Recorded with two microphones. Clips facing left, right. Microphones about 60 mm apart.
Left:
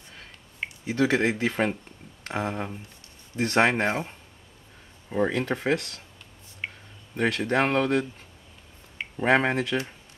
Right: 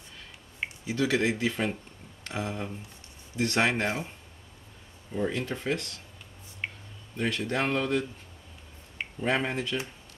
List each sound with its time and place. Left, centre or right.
0.8 s speech: left
5.1 s speech: left
7.2 s speech: left
7.4 s speech: left
9.2 s speech: left